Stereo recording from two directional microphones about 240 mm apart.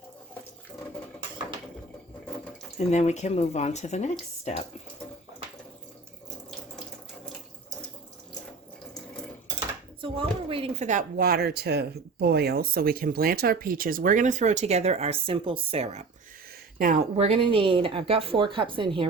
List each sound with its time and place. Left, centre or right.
2.7 s speech: left
10.0 s speech: right